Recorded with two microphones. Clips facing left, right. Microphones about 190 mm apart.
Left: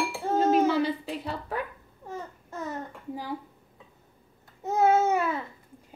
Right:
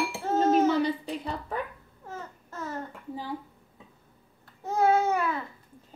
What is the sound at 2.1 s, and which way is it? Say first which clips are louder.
Babbling: left 3 dB; 15° left (ahead or behind).